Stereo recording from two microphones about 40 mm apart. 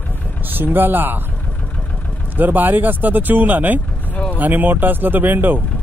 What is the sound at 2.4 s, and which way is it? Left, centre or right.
Speech, right.